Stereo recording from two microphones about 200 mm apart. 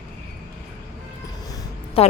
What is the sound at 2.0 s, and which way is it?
Speech, 30° left (ahead or behind).